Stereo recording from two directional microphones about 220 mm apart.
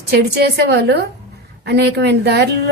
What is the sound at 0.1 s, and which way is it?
A woman's voice, 45° right (ahead or behind).